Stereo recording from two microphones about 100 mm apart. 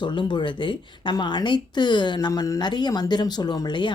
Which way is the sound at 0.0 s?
50° left (ahead or behind).